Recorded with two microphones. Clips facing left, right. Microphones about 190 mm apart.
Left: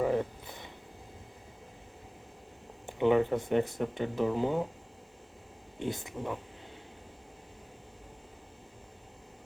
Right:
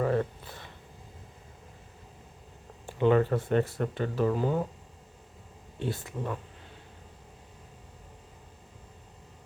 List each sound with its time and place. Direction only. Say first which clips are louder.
0.0 s a sound: right 1 dB; 15° left (ahead or behind)
2.8 s speech: right 1 dB; 15° left (ahead or behind)
5.8 s speech: right 1 dB; 15° left (ahead or behind)